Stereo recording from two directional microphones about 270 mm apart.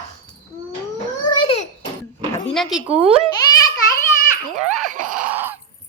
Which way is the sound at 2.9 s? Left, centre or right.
Right.